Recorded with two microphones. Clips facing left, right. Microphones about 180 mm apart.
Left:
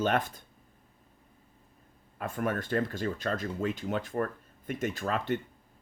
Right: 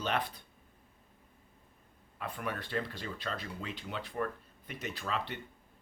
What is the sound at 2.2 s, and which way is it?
Speech, 45° left (ahead or behind).